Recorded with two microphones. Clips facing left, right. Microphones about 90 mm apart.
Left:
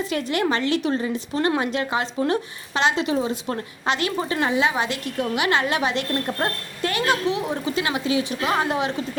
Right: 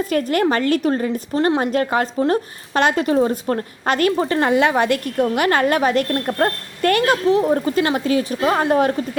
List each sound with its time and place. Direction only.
0.0 s a woman's voice: 45° right (ahead or behind)
1.4 s a woman's voice: 35° right (ahead or behind)
7.3 s a woman's voice: 40° right (ahead or behind)